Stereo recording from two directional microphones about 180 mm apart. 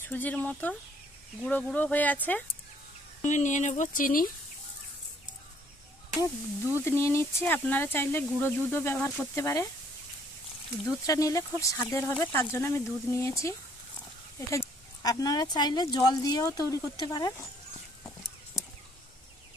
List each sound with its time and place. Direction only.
0.0 s speech: 10° left (ahead or behind)
3.3 s speech: 40° left (ahead or behind)
6.2 s speech: 15° left (ahead or behind)
10.9 s speech: 20° left (ahead or behind)